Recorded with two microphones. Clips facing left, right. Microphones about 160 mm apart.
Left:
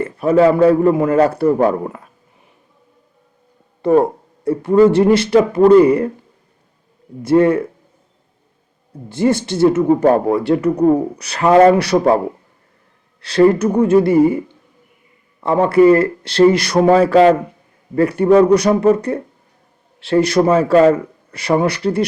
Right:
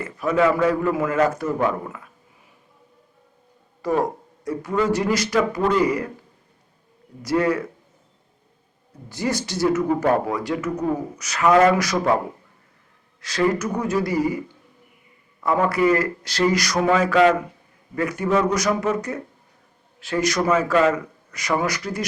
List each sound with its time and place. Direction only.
0.0 s a man's voice: 30° left (ahead or behind)
3.9 s speech: 30° left (ahead or behind)
7.2 s speech: 25° left (ahead or behind)
9.0 s a man's voice: 25° left (ahead or behind)
13.2 s a man's voice: 30° left (ahead or behind)